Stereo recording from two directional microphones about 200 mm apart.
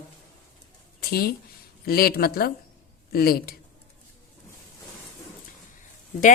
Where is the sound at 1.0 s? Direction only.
50° left (ahead or behind).